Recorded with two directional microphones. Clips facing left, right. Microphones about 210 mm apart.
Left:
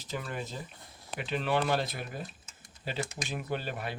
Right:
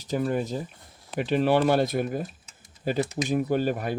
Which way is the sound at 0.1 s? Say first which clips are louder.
Right 11 dB; 40° right (ahead or behind).